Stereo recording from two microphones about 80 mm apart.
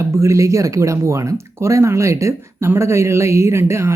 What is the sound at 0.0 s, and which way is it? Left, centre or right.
Speech, right.